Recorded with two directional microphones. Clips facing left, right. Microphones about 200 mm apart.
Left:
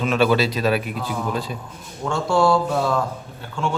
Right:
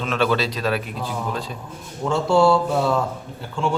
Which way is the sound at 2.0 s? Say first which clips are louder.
Right 2 dB; 5° right (ahead or behind).